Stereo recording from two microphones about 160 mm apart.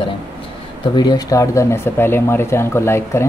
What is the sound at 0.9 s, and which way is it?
Speech, 25° left (ahead or behind).